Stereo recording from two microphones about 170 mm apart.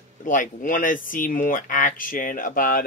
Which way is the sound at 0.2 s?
50° left (ahead or behind).